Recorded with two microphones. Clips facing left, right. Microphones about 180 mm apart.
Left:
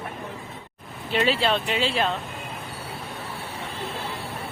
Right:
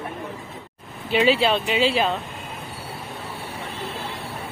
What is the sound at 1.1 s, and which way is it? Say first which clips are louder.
Speech: right 4 dB; 5° right (ahead or behind).